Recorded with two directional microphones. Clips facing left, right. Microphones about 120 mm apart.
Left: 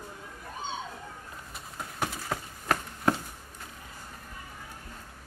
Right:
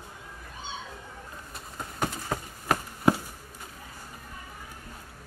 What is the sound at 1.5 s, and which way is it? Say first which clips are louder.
Chopping: right 1 dB; centre (ahead or behind).